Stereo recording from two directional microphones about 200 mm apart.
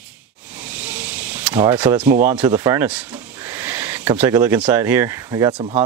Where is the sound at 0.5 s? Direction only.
10° right (ahead or behind).